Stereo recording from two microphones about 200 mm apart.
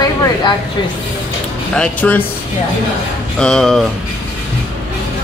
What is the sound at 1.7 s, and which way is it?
Speech, 5° left (ahead or behind).